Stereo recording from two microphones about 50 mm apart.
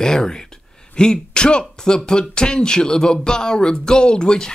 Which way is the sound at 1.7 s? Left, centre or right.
Centre.